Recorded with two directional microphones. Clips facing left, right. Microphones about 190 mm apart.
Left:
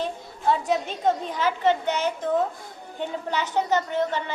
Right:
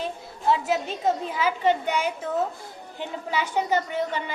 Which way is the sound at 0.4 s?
5° right (ahead or behind).